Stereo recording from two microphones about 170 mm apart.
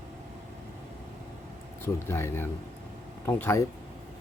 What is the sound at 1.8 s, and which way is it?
Speech, 15° left (ahead or behind).